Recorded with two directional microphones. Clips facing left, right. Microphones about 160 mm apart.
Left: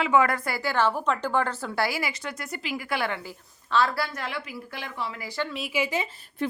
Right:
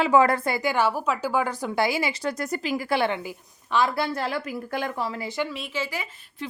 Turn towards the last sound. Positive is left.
turn(degrees=55)  # may be behind; listen again after turning